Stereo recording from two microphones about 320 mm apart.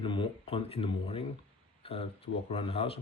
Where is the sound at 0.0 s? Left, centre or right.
Centre.